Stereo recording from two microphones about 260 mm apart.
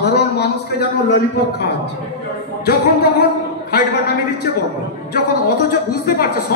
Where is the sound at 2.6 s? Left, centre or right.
Left.